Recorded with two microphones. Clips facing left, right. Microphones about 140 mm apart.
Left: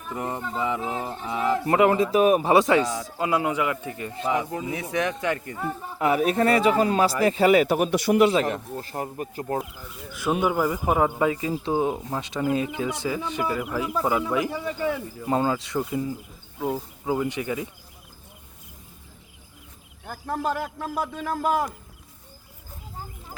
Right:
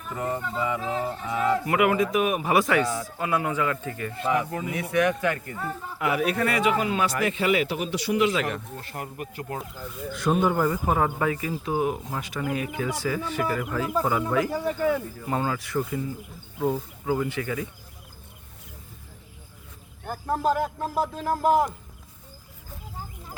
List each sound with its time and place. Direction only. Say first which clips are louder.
0.1 s speech: right 1 dB; 20° left (ahead or behind)
6.0 s speech: left 4 dB; 30° left (ahead or behind); by 8.3 s 50° left (ahead or behind)
8.3 s speech: left 4 dB; 35° left (ahead or behind)
10.1 s speech: right 1 dB; 5° left (ahead or behind); by 16.1 s 25° left (ahead or behind)
16.6 s speech: right 2 dB; 5° left (ahead or behind)
17.1 s speech: left 1 dB; 20° left (ahead or behind)
20.1 s speech: right 3 dB; 25° right (ahead or behind)
20.4 s music: right 3 dB; 40° right (ahead or behind)